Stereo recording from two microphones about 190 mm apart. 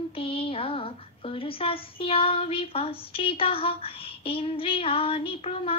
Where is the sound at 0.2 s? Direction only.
30° left (ahead or behind).